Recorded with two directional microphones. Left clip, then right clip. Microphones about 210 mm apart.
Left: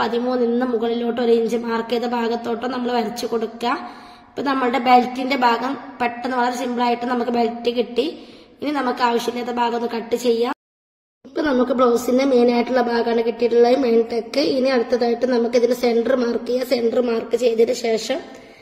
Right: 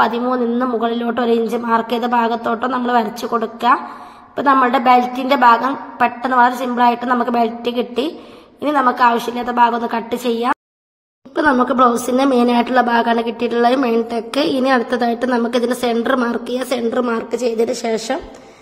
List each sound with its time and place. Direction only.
0.0 s a woman's voice: 5° right (ahead or behind)
11.6 s a woman's voice: 10° right (ahead or behind)